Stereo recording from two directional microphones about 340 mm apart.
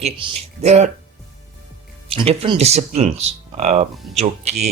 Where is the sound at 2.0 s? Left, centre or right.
Centre.